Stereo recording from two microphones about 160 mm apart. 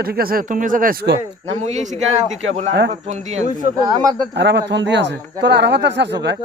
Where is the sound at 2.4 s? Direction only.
45° right (ahead or behind).